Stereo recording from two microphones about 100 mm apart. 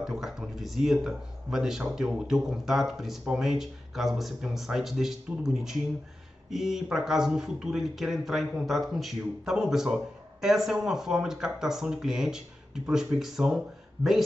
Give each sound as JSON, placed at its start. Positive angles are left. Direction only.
{"t": 0.0, "sound": "speech", "side_deg": -5}